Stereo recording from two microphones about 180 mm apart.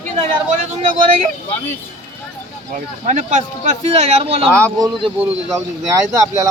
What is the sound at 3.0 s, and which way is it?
Speech, 40° right (ahead or behind).